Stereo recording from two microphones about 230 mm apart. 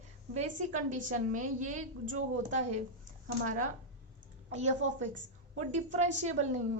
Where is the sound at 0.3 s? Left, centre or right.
Right.